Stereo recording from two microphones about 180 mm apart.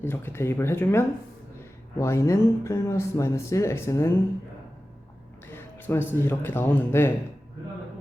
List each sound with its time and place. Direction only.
0.0 s speech: 15° left (ahead or behind)
5.5 s speech: 15° left (ahead or behind)